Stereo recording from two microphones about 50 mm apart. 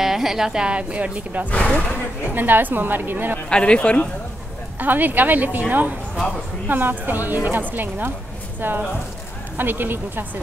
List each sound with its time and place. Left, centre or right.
0.0 s speech: centre; by 1.5 s right
1.5 s speech: left
2.3 s a woman's voice: right
3.4 s speech: centre
4.7 s a woman's voice: right